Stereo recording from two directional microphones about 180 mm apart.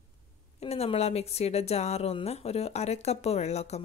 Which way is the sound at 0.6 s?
35° left (ahead or behind).